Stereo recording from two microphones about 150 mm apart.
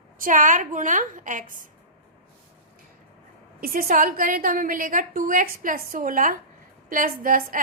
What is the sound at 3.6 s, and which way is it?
A woman's voice, 75° right (ahead or behind).